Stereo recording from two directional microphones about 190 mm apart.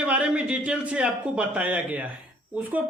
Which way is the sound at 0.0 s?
5° right (ahead or behind).